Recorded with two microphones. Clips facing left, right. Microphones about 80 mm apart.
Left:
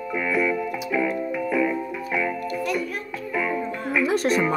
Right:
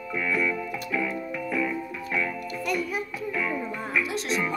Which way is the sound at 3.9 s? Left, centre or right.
Left.